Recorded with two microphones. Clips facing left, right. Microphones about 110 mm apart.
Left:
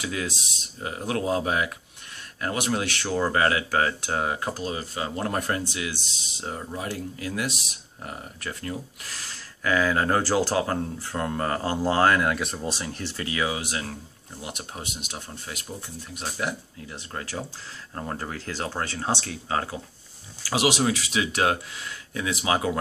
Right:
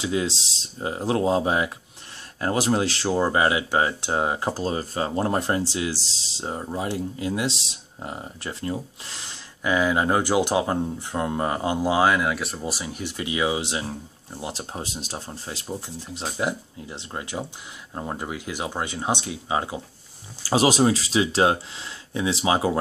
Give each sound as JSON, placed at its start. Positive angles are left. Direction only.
{"t": 0.0, "sound": "speech", "side_deg": -25}
{"t": 20.4, "sound": "speech", "side_deg": -35}